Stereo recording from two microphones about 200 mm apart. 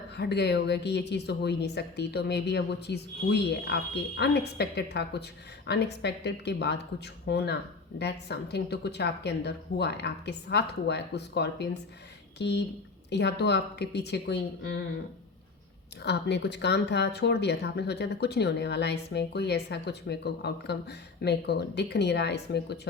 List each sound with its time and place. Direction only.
0.2 s a woman's voice: 55° left (ahead or behind)
16.0 s a woman's voice: 55° left (ahead or behind)